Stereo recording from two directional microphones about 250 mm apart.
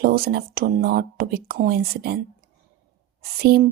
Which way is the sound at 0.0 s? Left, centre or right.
Right.